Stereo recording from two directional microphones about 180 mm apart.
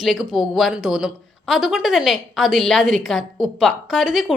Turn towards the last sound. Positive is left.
turn(degrees=0)  # may be behind; listen again after turning